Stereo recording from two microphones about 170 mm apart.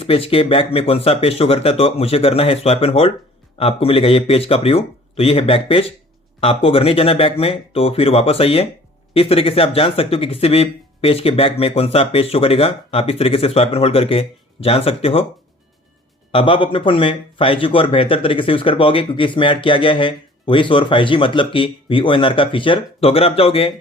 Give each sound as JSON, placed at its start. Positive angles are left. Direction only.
{"t": 0.0, "sound": "speech", "side_deg": 35}
{"t": 16.3, "sound": "speech", "side_deg": 30}